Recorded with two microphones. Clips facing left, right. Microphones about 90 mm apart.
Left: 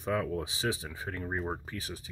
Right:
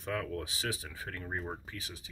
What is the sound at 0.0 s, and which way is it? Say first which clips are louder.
Speech: left 5 dB; 20° left (ahead or behind).